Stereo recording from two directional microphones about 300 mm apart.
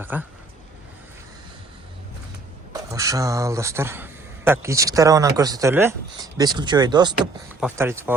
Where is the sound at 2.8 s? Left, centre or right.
Centre.